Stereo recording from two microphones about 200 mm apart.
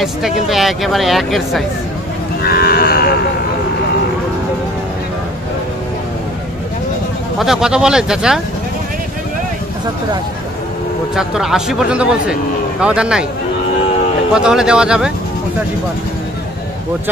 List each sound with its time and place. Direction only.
0.0 s speech: centre (ahead or behind)
2.4 s moo: 50° left (ahead or behind)
7.3 s speech: centre (ahead or behind)
11.1 s speech: 5° right (ahead or behind)
14.3 s speech: 5° right (ahead or behind)